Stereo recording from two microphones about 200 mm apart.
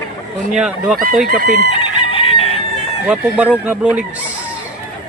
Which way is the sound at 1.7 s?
25° left (ahead or behind).